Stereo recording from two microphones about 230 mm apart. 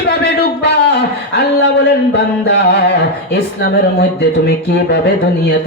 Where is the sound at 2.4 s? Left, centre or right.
Left.